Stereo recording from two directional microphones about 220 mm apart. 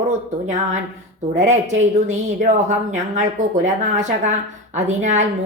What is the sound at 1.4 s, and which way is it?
Speech, 30° right (ahead or behind).